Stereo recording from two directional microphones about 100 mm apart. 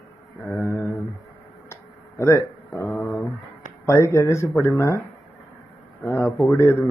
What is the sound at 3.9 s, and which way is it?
A man's voice, 30° left (ahead or behind).